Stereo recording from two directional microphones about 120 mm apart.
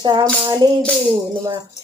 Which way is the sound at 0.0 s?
35° right (ahead or behind).